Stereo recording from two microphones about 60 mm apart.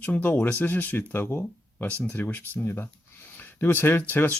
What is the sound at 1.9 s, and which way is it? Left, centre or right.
Speech, left.